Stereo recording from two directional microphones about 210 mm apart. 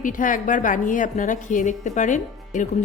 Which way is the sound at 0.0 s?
40° left (ahead or behind).